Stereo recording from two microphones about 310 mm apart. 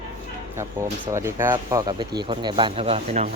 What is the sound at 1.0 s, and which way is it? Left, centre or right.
Speech, centre.